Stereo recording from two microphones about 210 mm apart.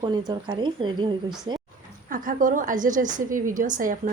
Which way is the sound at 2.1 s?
40° right (ahead or behind).